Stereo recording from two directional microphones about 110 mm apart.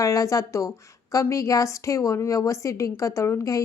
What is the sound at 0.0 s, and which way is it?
A woman's voice, 30° left (ahead or behind).